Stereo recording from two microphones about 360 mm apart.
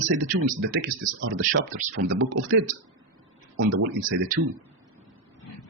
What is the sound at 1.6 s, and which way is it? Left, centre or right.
Speech, right.